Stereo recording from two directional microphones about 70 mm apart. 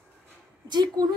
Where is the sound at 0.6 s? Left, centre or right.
Right.